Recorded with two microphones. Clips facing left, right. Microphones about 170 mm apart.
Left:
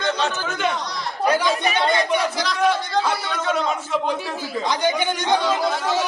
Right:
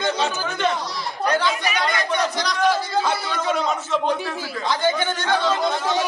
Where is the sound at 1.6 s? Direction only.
30° left (ahead or behind).